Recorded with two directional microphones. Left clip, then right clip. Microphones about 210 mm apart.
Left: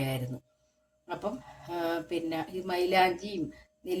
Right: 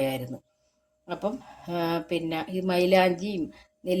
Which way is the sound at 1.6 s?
45° right (ahead or behind).